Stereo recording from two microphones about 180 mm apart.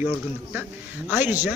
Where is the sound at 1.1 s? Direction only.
10° right (ahead or behind).